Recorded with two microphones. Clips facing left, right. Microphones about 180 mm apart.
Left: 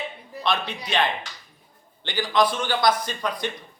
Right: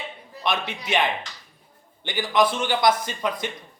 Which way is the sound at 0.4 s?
20° right (ahead or behind).